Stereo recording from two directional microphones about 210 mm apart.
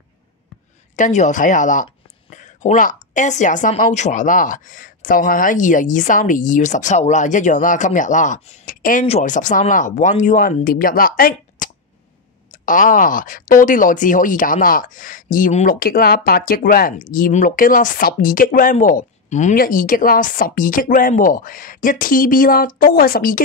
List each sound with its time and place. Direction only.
0.9 s speech: 35° left (ahead or behind)